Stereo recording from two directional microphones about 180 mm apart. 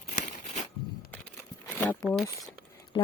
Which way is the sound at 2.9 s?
25° left (ahead or behind).